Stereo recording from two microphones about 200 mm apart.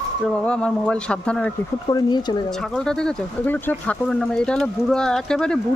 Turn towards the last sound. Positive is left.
turn(degrees=5)  # may be behind; listen again after turning